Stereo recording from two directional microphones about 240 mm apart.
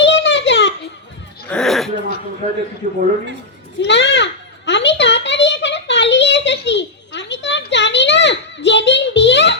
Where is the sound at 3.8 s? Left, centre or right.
Left.